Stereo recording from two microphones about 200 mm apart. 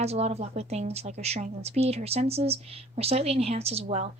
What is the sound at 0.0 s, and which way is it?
Speech, 30° right (ahead or behind).